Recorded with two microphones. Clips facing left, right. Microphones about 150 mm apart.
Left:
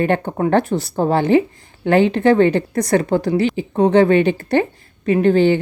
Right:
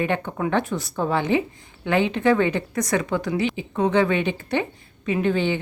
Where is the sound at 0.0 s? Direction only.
35° left (ahead or behind).